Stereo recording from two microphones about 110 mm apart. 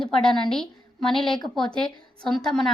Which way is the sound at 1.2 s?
45° left (ahead or behind).